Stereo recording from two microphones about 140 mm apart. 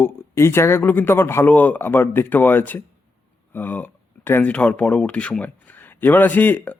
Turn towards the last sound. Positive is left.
turn(degrees=10)  # may be behind; listen again after turning